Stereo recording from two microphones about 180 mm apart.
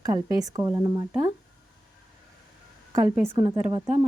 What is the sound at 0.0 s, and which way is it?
Speech, 20° right (ahead or behind).